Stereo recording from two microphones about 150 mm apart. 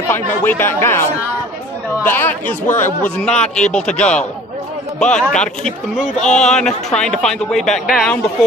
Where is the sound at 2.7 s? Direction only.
55° left (ahead or behind).